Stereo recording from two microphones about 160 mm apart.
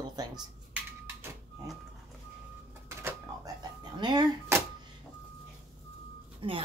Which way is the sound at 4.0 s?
25° right (ahead or behind).